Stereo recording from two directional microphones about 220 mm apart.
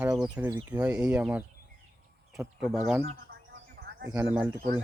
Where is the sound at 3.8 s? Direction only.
50° right (ahead or behind).